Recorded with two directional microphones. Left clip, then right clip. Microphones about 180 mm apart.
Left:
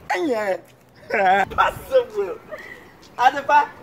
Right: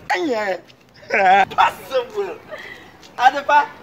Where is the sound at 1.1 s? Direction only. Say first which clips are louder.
Right 4 dB; 5° left (ahead or behind).